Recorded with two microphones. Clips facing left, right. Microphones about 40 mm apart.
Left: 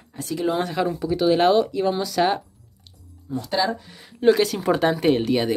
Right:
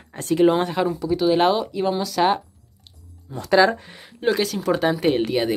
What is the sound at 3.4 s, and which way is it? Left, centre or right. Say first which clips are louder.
Speech: right 8 dB; right.